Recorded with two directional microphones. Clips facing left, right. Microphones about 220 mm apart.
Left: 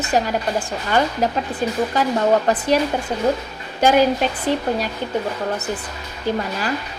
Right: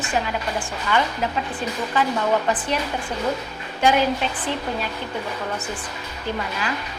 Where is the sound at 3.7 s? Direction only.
40° left (ahead or behind).